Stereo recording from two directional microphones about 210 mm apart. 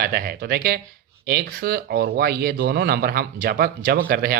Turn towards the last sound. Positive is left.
turn(degrees=-45)  # may be behind; listen again after turning